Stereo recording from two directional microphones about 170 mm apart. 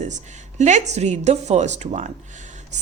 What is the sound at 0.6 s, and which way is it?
Speech, 45° right (ahead or behind).